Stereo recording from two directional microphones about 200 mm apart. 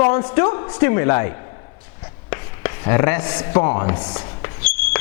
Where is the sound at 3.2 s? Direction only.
25° left (ahead or behind).